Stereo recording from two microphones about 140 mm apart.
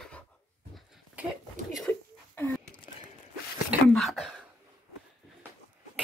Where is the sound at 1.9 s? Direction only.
15° left (ahead or behind).